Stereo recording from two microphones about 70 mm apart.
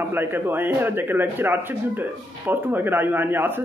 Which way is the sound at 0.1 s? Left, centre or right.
Right.